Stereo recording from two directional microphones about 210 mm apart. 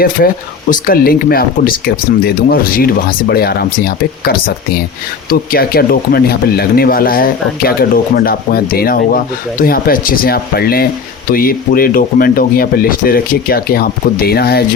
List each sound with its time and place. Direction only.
0.2 s speech: 45° left (ahead or behind)